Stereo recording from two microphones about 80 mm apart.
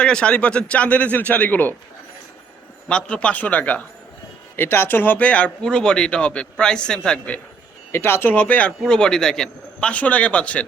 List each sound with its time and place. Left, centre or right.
0.0 s speech: centre
2.9 s speech: centre
7.9 s speech: left; by 9.9 s centre
9.9 s speech: centre